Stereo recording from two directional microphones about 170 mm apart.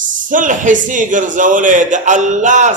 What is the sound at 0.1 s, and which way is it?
A man's voice, 50° right (ahead or behind).